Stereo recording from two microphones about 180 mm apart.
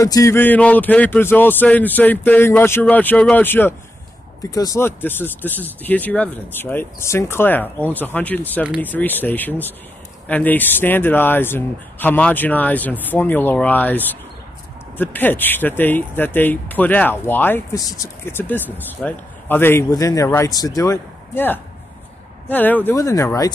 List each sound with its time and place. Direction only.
0.0 s speech: 20° left (ahead or behind)
15.0 s speech: 10° left (ahead or behind)